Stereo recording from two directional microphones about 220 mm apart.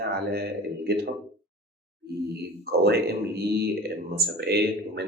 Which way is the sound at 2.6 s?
45° right (ahead or behind).